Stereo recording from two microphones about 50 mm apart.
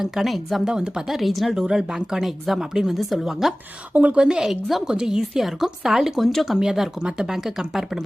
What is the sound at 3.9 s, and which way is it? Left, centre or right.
Speech, right.